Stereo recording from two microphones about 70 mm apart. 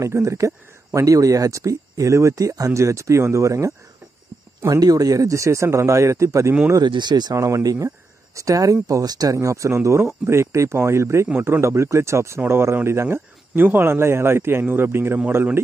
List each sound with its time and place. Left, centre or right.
0.0 s speech: right
4.7 s speech: right
6.8 s speech: right
7.3 s speech: right
8.8 s a man's voice: right
11.3 s a man's voice: right
11.6 s a man's voice: right